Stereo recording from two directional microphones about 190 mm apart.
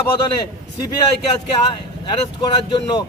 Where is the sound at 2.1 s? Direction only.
25° left (ahead or behind).